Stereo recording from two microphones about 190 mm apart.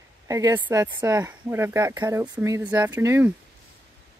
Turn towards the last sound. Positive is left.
turn(degrees=-15)  # may be behind; listen again after turning